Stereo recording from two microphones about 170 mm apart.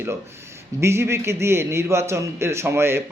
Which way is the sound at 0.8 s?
15° right (ahead or behind).